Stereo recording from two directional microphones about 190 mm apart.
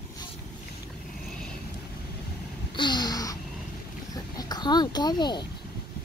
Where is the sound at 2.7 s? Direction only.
25° left (ahead or behind).